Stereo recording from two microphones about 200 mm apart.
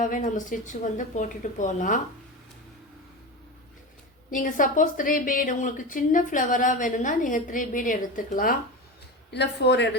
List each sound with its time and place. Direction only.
0.0 s a woman's voice: 40° left (ahead or behind)
4.3 s a woman's voice: 40° left (ahead or behind)
9.3 s speech: 55° left (ahead or behind)